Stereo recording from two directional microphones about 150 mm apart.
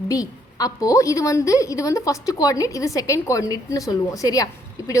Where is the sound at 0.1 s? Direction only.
25° left (ahead or behind).